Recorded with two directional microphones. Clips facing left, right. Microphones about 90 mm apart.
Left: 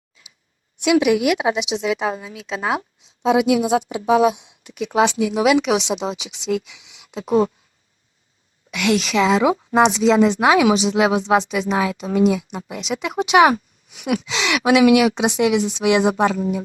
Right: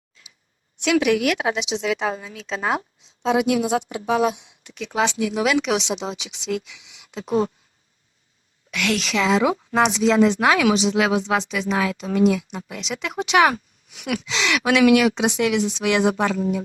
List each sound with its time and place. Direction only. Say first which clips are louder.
0.8 s speech: left 3 dB; 10° left (ahead or behind)
7.3 s speech: left 4 dB; 35° left (ahead or behind)
8.7 s speech: left 4 dB; 10° left (ahead or behind)
9.8 s speech: left 2 dB; centre (ahead or behind); by 16.6 s 25° left (ahead or behind)